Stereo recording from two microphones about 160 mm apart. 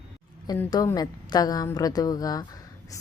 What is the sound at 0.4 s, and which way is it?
A woman's voice, 25° left (ahead or behind).